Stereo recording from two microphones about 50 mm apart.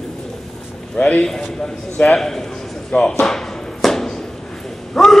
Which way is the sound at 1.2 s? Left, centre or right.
Centre.